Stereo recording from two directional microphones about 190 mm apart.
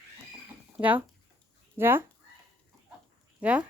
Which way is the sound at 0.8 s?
10° right (ahead or behind).